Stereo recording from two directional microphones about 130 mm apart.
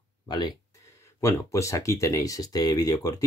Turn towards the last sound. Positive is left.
turn(degrees=30)  # may be behind; listen again after turning